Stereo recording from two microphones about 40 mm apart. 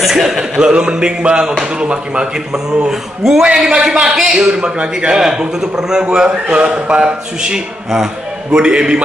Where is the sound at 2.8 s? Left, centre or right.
Centre.